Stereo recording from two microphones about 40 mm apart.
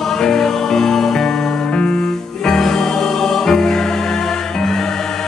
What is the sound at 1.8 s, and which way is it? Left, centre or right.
Music, left.